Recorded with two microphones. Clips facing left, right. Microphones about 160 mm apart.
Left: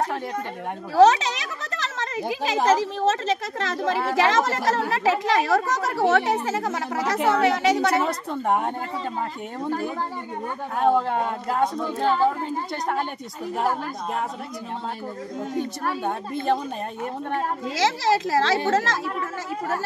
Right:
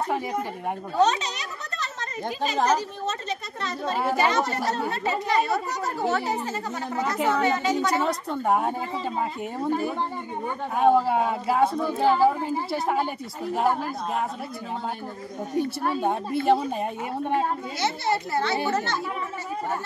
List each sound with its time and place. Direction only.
0.9 s a sound: 90° left
2.4 s a woman's voice: 90° left
8.0 s a woman's voice: centre (ahead or behind)
10.8 s speech: 5° right (ahead or behind)
15.8 s speech: 15° right (ahead or behind)
17.7 s a woman's voice: 90° left